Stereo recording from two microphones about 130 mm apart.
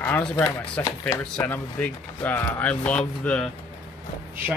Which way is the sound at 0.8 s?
15° left (ahead or behind).